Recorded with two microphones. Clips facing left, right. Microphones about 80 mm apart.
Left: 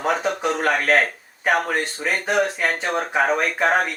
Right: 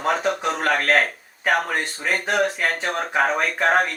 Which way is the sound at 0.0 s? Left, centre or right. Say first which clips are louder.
Even; centre.